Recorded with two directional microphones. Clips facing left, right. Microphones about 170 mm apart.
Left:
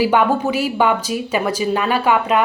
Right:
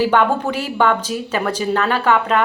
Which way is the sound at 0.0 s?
10° left (ahead or behind).